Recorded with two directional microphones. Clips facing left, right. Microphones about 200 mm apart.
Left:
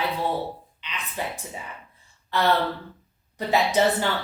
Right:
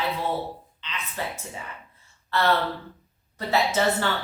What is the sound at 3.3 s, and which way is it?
Speech, 15° left (ahead or behind).